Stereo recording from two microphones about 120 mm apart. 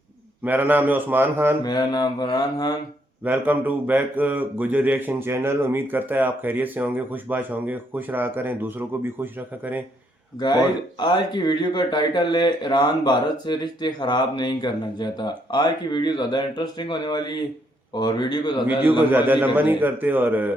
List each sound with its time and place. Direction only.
0.4 s speech: 15° right (ahead or behind)
1.6 s speech: 40° left (ahead or behind)
3.2 s speech: 15° right (ahead or behind)
11.0 s speech: 40° left (ahead or behind)
19.1 s speech: 15° right (ahead or behind)